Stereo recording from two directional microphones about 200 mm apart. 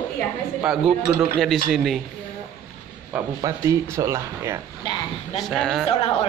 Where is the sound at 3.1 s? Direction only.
15° right (ahead or behind).